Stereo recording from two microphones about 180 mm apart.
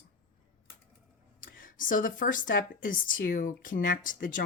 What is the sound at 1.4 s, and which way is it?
Speech, 50° left (ahead or behind).